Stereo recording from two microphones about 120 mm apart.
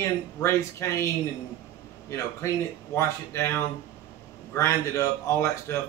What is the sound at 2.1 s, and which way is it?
A man's voice, 20° left (ahead or behind).